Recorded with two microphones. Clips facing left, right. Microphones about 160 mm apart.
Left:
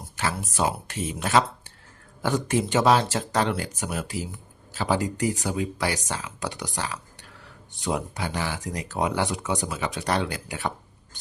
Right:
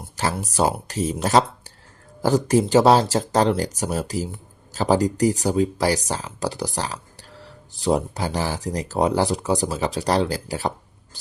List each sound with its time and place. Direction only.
0.2 s speech: 40° right (ahead or behind)